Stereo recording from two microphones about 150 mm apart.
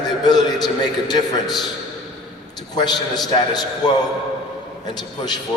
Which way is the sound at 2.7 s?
30° left (ahead or behind).